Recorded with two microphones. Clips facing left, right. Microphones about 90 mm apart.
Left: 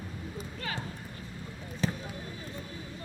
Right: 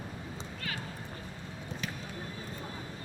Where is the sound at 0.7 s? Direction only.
30° left (ahead or behind).